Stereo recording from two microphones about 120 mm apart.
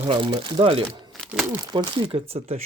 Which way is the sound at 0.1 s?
45° right (ahead or behind).